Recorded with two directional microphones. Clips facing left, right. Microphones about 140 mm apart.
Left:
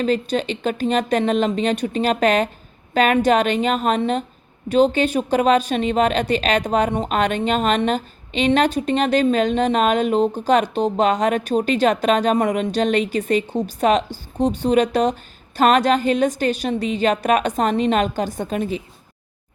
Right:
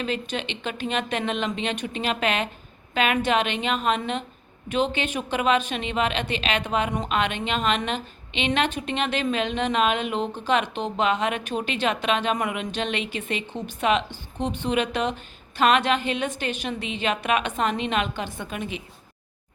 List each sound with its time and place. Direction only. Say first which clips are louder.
0.0 s speech: left 8 dB; 40° left (ahead or behind)